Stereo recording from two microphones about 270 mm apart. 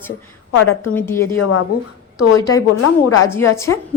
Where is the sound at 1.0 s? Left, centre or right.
Centre.